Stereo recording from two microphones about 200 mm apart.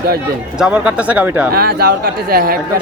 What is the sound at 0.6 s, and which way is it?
Speech, 5° right (ahead or behind).